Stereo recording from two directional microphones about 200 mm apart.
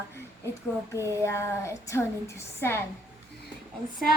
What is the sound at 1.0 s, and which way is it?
Child singing, 15° right (ahead or behind).